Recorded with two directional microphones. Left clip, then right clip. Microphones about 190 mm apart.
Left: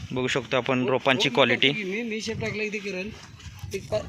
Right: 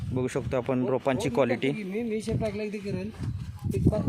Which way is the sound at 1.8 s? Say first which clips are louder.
Left 2 dB; 70° right (ahead or behind).